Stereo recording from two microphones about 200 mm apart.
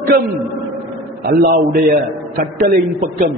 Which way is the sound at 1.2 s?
50° right (ahead or behind).